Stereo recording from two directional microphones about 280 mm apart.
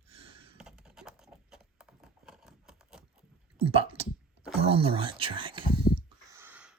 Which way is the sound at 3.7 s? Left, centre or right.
Right.